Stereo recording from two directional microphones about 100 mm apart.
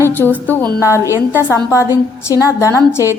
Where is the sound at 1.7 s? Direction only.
30° left (ahead or behind).